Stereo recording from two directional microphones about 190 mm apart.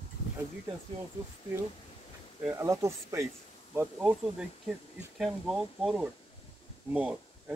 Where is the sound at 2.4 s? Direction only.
15° right (ahead or behind).